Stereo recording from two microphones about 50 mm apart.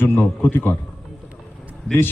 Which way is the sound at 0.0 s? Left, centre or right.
Left.